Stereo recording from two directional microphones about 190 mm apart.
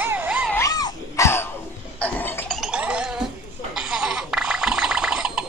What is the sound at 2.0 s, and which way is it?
Gargling, 10° left (ahead or behind).